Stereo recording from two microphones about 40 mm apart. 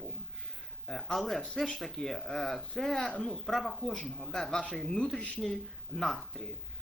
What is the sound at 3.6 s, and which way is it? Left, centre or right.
Speech, centre.